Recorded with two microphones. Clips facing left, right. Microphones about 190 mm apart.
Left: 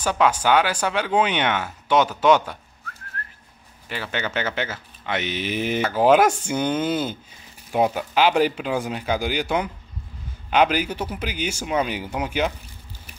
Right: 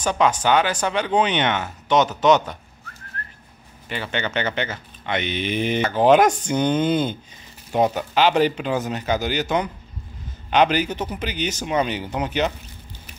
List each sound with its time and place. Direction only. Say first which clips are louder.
0.0 s speech: even; 5° left (ahead or behind)
3.2 s whistling: right 1 dB; 5° left (ahead or behind)
3.9 s speech: right 2 dB; 5° left (ahead or behind)